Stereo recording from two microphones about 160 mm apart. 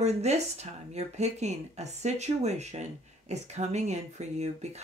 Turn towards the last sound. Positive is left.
turn(degrees=-45)  # may be behind; listen again after turning